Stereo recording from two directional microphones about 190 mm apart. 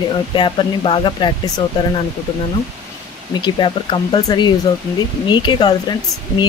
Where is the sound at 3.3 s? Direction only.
25° left (ahead or behind).